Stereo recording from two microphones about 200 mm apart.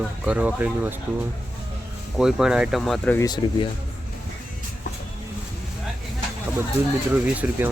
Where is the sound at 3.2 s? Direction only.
20° left (ahead or behind).